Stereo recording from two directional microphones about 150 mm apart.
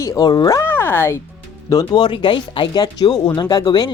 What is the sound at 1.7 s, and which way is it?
Speech, 25° left (ahead or behind).